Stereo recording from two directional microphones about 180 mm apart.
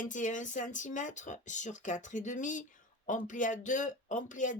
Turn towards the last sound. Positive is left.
turn(degrees=45)  # may be behind; listen again after turning